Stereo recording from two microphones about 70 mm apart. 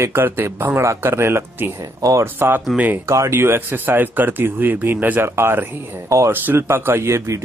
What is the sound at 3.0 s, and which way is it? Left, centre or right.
Speech, right.